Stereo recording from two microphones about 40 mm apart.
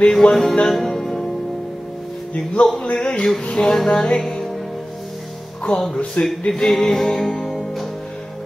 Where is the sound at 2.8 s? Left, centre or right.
Left.